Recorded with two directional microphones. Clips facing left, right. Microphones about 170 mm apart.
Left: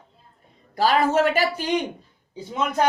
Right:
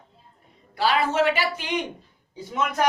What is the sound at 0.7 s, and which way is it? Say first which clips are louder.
Speech: left 3 dB; 45° left (ahead or behind).